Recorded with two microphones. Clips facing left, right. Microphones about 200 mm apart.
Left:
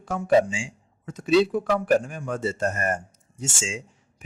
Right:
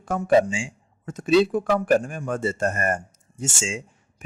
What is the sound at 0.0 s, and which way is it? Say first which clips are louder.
Speech: right 1 dB; 50° right (ahead or behind).